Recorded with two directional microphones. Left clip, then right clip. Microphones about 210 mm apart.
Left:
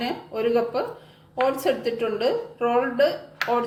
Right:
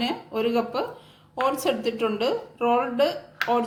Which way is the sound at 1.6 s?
35° right (ahead or behind).